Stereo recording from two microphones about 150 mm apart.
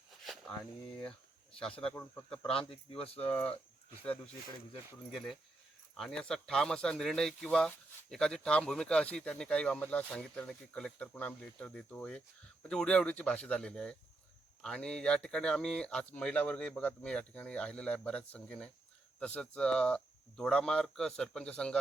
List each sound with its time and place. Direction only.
1.8 s speech: 15° left (ahead or behind)
2.4 s speech: 40° left (ahead or behind)
3.2 s speech: 10° left (ahead or behind)
5.1 s speech: centre (ahead or behind)